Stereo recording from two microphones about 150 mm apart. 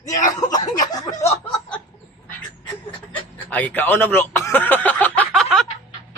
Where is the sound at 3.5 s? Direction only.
10° left (ahead or behind).